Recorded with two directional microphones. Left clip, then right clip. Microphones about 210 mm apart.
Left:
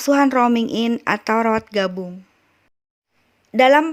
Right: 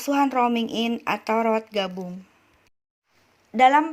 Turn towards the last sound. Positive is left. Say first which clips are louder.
# left 4 dB
turn(degrees=40)  # may be behind; listen again after turning